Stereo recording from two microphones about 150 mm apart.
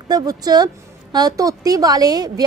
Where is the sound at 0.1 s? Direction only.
25° right (ahead or behind).